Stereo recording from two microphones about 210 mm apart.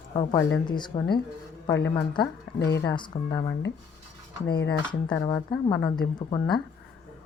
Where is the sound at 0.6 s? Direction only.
20° left (ahead or behind).